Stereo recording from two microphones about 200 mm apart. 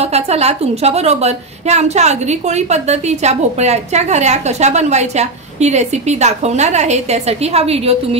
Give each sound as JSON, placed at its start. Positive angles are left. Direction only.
{"t": 0.0, "sound": "a woman's voice", "side_deg": -30}